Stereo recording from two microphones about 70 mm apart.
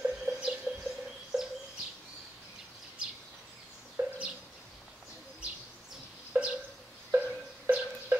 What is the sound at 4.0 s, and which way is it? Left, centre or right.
Bird, right.